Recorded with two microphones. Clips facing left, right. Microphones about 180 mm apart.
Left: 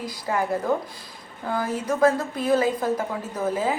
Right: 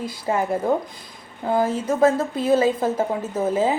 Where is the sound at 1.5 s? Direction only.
25° right (ahead or behind).